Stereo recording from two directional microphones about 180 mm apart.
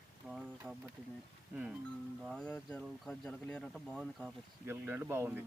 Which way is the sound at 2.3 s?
5° left (ahead or behind).